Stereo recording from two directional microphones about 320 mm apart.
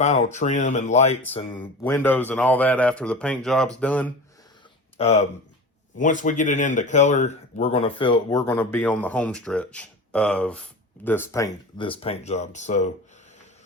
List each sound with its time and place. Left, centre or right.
0.0 s speech: left
1.6 s a man's voice: centre
4.9 s speech: left